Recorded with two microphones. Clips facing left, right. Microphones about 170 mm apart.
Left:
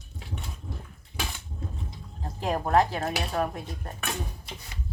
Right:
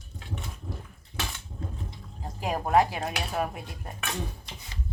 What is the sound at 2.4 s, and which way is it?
Speech, 10° right (ahead or behind).